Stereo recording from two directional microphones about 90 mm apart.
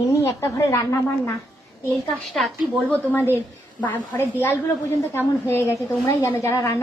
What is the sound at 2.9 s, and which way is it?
A woman's voice, 20° left (ahead or behind).